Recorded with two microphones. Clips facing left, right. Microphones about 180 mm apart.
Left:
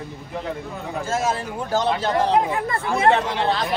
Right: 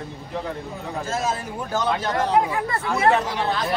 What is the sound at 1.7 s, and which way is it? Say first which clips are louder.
Speech: left 3 dB; 30° left (ahead or behind).